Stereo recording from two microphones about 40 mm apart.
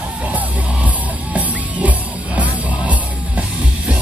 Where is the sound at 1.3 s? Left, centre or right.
Right.